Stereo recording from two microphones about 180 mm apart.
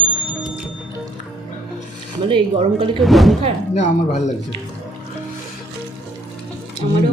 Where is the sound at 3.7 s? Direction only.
40° left (ahead or behind).